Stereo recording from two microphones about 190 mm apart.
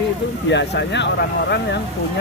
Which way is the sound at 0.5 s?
65° left (ahead or behind).